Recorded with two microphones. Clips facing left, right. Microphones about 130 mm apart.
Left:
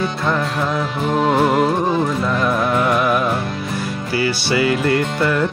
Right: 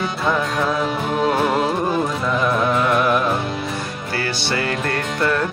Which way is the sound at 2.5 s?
5° left (ahead or behind).